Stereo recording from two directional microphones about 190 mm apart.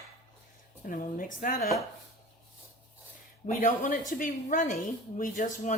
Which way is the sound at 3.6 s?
45° left (ahead or behind).